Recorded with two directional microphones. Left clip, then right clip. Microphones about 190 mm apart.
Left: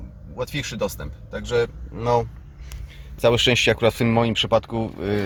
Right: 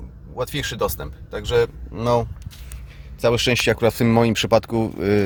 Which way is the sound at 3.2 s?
Centre (ahead or behind).